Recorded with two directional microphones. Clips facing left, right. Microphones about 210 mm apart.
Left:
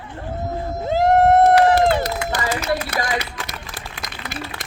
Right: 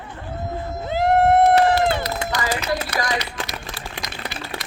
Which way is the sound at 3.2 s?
50° left (ahead or behind).